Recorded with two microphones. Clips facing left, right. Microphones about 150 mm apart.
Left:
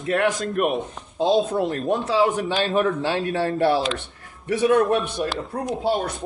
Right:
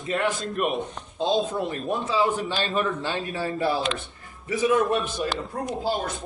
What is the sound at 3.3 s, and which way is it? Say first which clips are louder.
Speech: left 5 dB; 70° left (ahead or behind).